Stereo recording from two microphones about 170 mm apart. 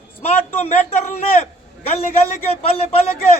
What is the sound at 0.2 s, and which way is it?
Speech, 40° left (ahead or behind).